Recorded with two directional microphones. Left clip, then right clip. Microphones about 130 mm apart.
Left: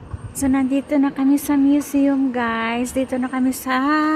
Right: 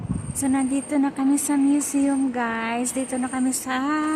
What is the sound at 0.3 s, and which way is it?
A woman's voice, 40° left (ahead or behind).